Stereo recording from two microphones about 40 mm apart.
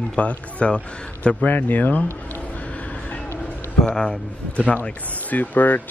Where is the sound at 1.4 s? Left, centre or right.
Left.